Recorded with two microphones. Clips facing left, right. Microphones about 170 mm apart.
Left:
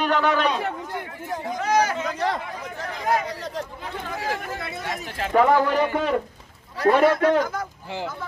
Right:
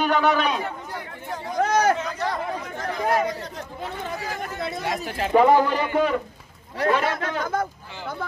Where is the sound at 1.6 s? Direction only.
50° right (ahead or behind).